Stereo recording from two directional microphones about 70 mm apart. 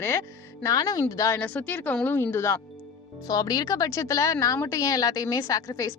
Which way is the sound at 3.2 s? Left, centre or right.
Left.